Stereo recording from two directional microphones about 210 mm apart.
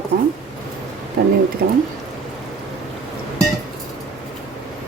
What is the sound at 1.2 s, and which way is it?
Speech, 50° right (ahead or behind).